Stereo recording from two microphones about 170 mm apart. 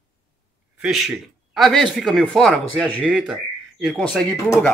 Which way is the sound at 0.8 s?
Centre (ahead or behind).